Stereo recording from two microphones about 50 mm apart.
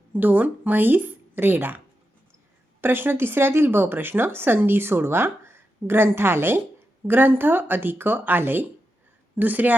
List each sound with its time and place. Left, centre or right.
0.1 s speech: right
2.8 s speech: right